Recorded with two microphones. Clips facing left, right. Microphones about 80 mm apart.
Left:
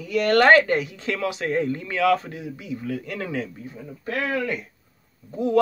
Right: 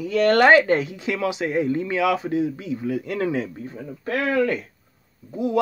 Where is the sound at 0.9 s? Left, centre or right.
Centre.